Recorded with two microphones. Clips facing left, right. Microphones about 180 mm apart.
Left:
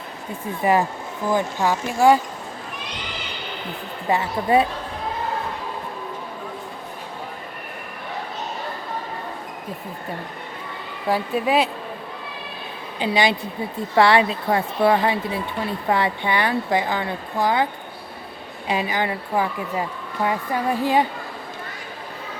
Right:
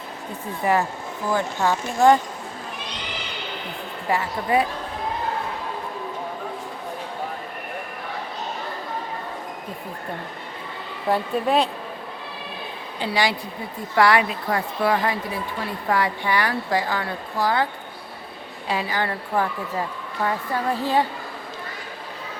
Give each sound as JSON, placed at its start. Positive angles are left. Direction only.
{"t": 0.6, "sound": "a woman's voice", "side_deg": 15}
{"t": 4.1, "sound": "speech", "side_deg": 25}
{"t": 11.1, "sound": "speech", "side_deg": 5}
{"t": 13.0, "sound": "speech", "side_deg": 20}
{"t": 18.7, "sound": "a woman's voice", "side_deg": 20}